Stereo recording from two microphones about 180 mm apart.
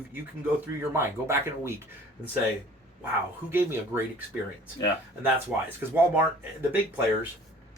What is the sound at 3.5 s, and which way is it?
Speech, 15° right (ahead or behind).